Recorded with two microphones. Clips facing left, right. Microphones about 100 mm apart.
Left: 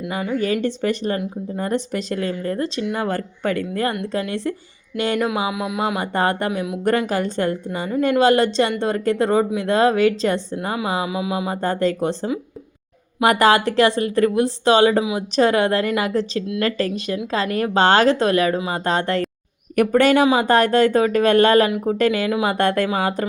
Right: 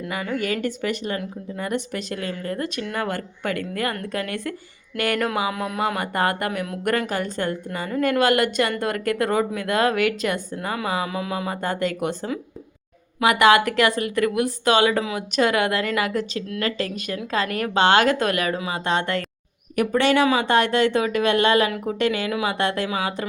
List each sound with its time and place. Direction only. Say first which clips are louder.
0.3 s a woman's voice: left 5 dB; 30° left (ahead or behind)
5.5 s a sound: left 2 dB; 10° left (ahead or behind)
6.0 s a woman's voice: left 3 dB; 30° left (ahead or behind)
11.0 s a sound: left 3 dB; 15° left (ahead or behind)
11.5 s a woman's voice: left 4 dB; 35° left (ahead or behind)
19.7 s a woman's voice: left 4 dB; 50° left (ahead or behind)